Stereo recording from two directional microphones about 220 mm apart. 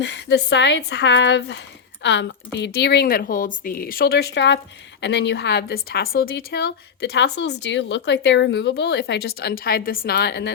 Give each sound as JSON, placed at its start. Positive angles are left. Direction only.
{"t": 0.0, "sound": "speech", "side_deg": 50}